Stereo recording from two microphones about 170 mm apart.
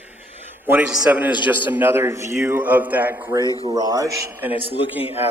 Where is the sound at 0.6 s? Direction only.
10° right (ahead or behind).